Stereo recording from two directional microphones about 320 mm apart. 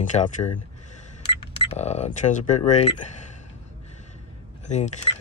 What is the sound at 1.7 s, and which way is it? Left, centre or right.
Speech, left.